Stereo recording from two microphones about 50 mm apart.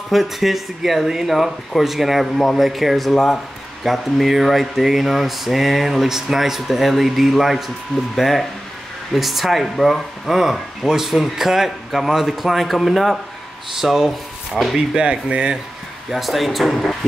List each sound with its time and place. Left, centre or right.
0.1 s speech: centre
15.0 s speech: right
16.1 s speech: centre